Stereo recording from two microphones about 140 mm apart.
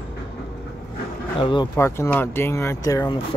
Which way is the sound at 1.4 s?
35° left (ahead or behind).